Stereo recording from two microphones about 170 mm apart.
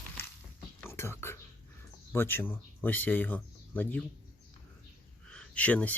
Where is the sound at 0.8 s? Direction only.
15° left (ahead or behind).